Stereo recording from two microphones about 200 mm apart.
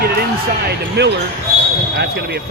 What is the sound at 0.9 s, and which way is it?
Speech, 60° right (ahead or behind).